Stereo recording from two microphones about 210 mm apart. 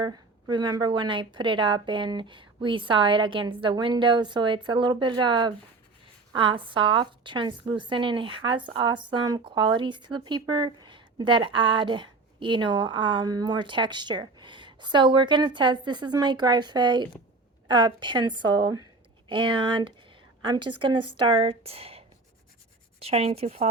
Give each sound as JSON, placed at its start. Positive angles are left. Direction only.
{"t": 0.0, "sound": "speech", "side_deg": -20}